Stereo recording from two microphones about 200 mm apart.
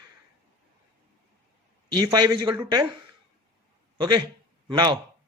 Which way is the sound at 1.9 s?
20° right (ahead or behind).